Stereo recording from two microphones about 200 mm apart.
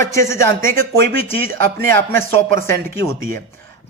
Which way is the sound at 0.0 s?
15° left (ahead or behind).